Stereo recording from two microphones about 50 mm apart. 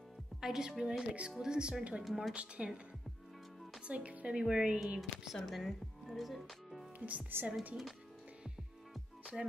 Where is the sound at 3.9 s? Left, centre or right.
Right.